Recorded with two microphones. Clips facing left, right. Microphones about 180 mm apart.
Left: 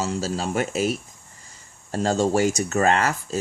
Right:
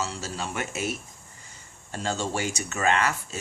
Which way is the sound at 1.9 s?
40° left (ahead or behind).